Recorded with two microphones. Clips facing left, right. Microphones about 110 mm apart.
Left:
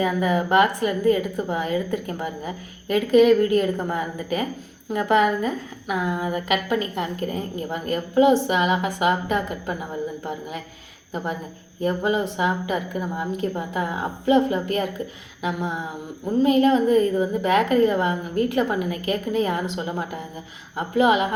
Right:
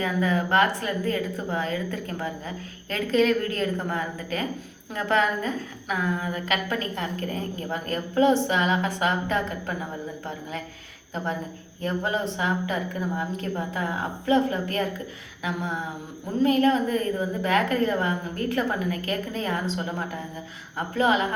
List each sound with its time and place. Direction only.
0.0 s a woman's voice: 15° left (ahead or behind)
11.8 s a woman's voice: 15° left (ahead or behind)